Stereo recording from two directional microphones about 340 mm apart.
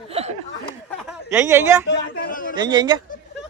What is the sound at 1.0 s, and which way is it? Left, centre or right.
Speech, centre.